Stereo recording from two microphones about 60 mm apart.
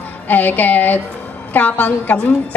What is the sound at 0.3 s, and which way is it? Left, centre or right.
A woman's voice, left.